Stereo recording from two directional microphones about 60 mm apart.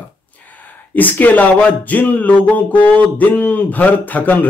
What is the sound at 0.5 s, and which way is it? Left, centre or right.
Speech, left.